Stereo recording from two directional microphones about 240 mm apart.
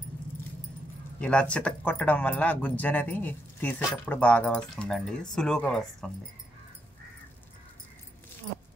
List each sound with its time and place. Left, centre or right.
1.2 s speech: centre